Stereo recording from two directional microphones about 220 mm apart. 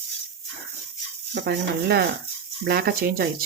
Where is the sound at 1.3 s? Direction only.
50° right (ahead or behind).